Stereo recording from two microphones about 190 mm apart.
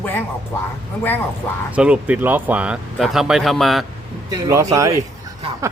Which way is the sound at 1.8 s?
5° right (ahead or behind).